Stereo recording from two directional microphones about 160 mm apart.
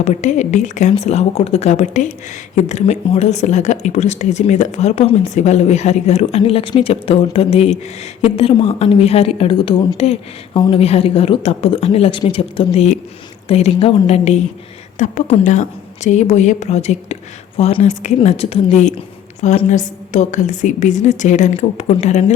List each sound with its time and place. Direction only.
0.0 s a woman's voice: 45° left (ahead or behind)